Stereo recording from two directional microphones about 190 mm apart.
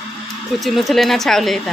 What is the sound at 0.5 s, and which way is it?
A woman's voice, centre (ahead or behind).